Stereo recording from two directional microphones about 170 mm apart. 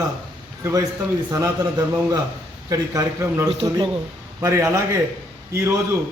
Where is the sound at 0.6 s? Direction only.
20° right (ahead or behind).